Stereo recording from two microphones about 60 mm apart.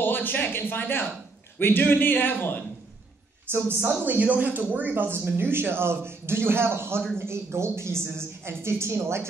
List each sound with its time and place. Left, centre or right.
0.0 s a man's voice: left
3.5 s speech: right
4.0 s a woman's voice: right